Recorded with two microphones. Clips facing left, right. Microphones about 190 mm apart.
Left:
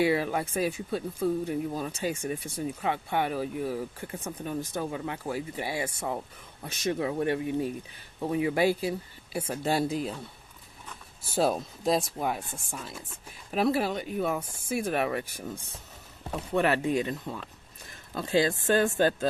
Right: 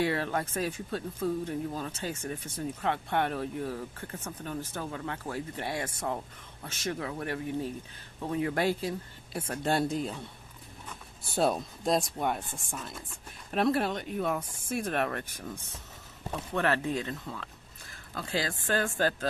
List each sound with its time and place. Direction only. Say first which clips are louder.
0.0 s speech: left 4 dB; 10° left (ahead or behind)
6.7 s speech: left 5 dB; 15° left (ahead or behind)
16.6 s speech: left 4 dB; 15° left (ahead or behind)